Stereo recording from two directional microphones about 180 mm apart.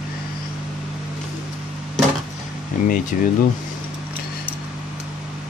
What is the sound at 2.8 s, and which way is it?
Speech, 50° left (ahead or behind).